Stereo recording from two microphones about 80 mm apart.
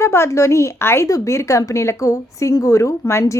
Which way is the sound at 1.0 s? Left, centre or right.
Left.